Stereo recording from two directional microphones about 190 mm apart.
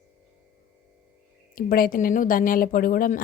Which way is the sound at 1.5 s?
50° left (ahead or behind).